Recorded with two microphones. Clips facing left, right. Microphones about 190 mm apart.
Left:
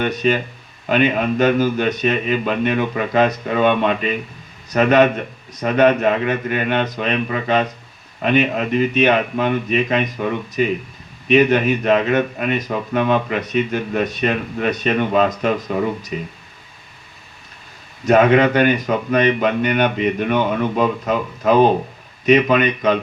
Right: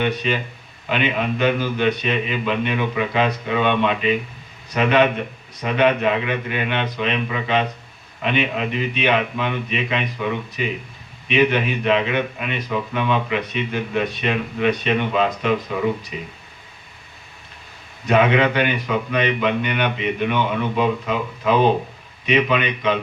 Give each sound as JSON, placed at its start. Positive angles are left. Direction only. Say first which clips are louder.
{"t": 0.0, "sound": "speech", "louder": "left 3 dB", "side_deg": 45}
{"t": 18.0, "sound": "speech", "louder": "left 4 dB", "side_deg": 45}